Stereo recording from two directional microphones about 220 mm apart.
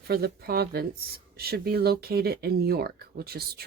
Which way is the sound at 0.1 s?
45° right (ahead or behind).